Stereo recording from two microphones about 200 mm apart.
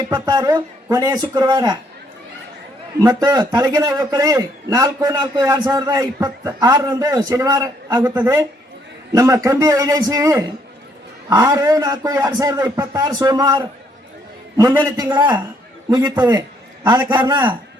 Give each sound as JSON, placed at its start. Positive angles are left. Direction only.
{"t": 0.1, "sound": "a man's voice", "side_deg": -20}
{"t": 3.0, "sound": "a man's voice", "side_deg": -20}
{"t": 14.8, "sound": "a man's voice", "side_deg": -20}